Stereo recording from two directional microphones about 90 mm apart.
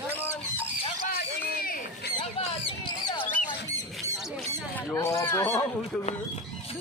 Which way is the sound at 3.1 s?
65° left (ahead or behind).